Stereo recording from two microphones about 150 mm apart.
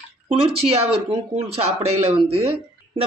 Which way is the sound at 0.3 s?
40° right (ahead or behind).